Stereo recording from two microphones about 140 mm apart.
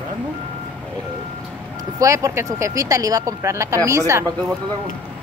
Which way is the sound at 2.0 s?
20° right (ahead or behind).